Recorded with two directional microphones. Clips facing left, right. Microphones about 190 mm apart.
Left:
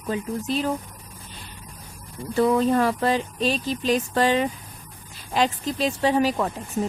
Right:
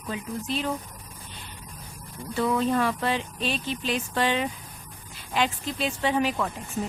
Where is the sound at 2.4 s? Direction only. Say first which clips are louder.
Left 5 dB; 40° left (ahead or behind).